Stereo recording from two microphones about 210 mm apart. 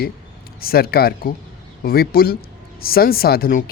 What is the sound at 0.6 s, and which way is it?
Speech, 45° left (ahead or behind).